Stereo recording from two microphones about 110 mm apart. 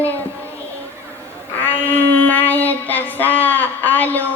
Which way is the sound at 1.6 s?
15° left (ahead or behind).